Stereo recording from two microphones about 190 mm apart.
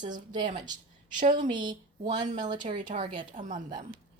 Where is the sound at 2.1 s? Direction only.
40° right (ahead or behind).